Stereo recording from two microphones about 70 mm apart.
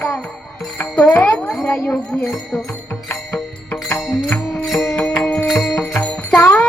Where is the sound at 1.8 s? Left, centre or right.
Left.